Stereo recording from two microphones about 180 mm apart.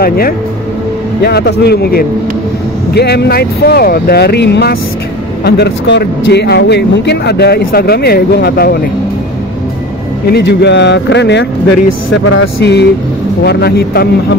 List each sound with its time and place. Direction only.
1.2 s speech: 60° left (ahead or behind)
10.3 s speech: 65° left (ahead or behind)